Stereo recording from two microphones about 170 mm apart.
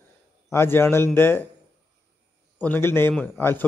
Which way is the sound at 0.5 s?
15° left (ahead or behind).